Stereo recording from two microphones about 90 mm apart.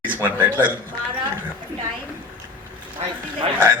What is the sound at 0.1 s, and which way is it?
Speech, 20° right (ahead or behind).